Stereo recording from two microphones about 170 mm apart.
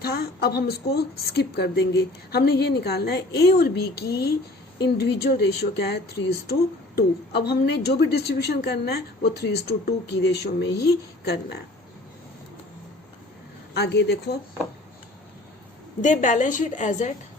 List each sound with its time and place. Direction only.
0.0 s speech: 70° left (ahead or behind)
13.7 s speech: 75° left (ahead or behind)
16.0 s a woman's voice: 45° left (ahead or behind)